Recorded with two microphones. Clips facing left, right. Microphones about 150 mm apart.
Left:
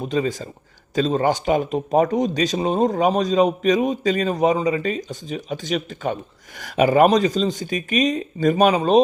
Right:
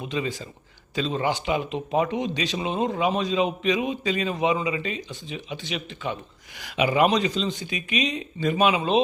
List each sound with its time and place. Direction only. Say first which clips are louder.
0.0 s a man's voice: left 6 dB; 40° left (ahead or behind)